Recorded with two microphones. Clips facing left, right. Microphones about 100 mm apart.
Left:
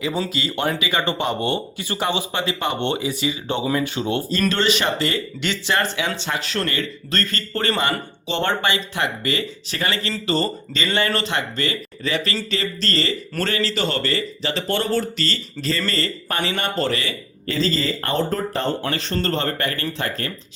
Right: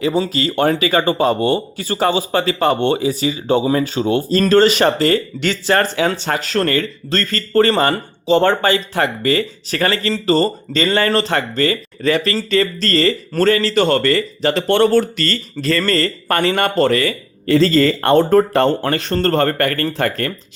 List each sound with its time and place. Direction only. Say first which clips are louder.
0.3 s a man's voice: right 7 dB; 50° right (ahead or behind)
17.5 s speech: right 10 dB; 70° right (ahead or behind); by 20.3 s 55° right (ahead or behind)